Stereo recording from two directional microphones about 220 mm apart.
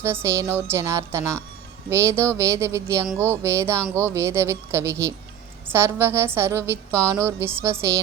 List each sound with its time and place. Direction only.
0.0 s a woman's voice: 10° right (ahead or behind)